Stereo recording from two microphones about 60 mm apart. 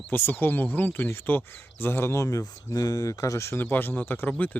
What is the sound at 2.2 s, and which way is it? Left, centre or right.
Speech, left.